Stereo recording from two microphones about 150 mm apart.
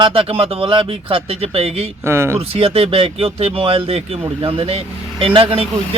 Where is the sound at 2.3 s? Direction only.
40° right (ahead or behind).